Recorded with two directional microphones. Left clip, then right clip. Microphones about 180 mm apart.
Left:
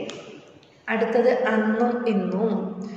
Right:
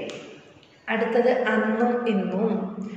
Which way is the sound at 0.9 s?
20° left (ahead or behind).